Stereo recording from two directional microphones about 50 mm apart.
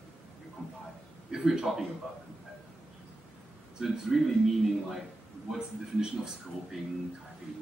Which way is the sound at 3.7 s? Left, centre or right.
Centre.